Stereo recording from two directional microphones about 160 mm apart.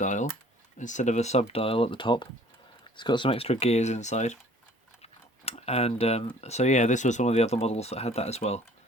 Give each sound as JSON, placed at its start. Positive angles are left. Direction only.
{"t": 0.0, "sound": "computer keyboard", "side_deg": 50}
{"t": 0.8, "sound": "speech", "side_deg": 50}